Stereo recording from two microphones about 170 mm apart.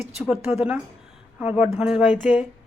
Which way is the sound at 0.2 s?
5° right (ahead or behind).